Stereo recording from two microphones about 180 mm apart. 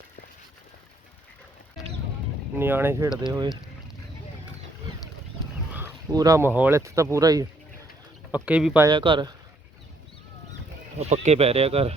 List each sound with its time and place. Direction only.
2.6 s speech: 10° right (ahead or behind)
5.7 s speech: 15° right (ahead or behind)
8.3 s speech: 5° right (ahead or behind)
8.9 s speech: 25° right (ahead or behind)
10.9 s speech: 40° right (ahead or behind)